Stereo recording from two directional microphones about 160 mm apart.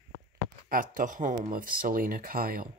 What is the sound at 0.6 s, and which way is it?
Speech, 60° right (ahead or behind).